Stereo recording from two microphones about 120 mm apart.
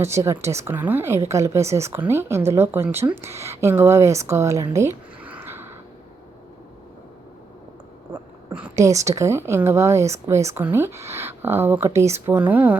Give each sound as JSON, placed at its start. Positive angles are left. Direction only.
{"t": 0.0, "sound": "a woman's voice", "side_deg": -25}
{"t": 5.2, "sound": "a sound", "side_deg": -15}
{"t": 8.7, "sound": "a woman's voice", "side_deg": -25}